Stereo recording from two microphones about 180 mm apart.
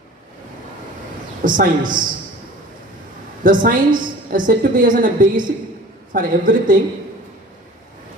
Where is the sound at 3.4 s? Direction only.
50° right (ahead or behind).